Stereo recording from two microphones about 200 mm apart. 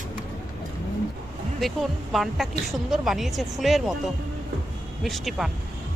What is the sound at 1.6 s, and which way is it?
Speech, centre (ahead or behind).